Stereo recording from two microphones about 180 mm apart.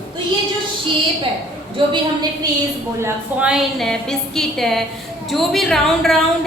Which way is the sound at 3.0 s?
10° right (ahead or behind).